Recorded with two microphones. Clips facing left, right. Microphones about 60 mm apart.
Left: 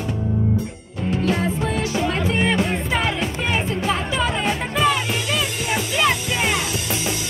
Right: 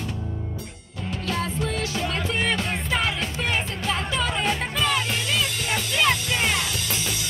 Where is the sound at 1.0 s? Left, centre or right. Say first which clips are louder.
Left 7 dB; left.